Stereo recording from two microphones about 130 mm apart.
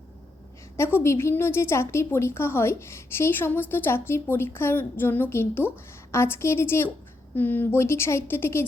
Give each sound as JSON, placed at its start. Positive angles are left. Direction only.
{"t": 0.9, "sound": "a woman's voice", "side_deg": 20}